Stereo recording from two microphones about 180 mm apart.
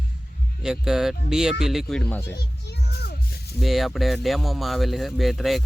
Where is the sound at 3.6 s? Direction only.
Centre (ahead or behind).